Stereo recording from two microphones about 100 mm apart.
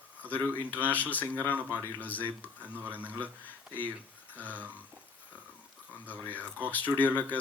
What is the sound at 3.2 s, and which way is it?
Speech, 15° left (ahead or behind).